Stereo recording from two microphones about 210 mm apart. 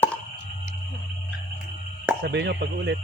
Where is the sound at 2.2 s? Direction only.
55° right (ahead or behind).